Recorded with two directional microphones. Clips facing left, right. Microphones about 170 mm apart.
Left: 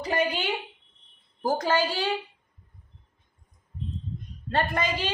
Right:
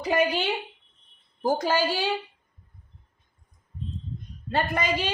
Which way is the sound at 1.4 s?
Centre (ahead or behind).